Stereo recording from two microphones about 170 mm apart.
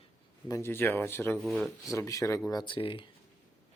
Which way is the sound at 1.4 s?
Centre (ahead or behind).